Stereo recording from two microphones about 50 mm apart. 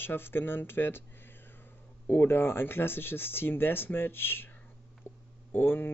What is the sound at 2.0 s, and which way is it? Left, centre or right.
Speech, left.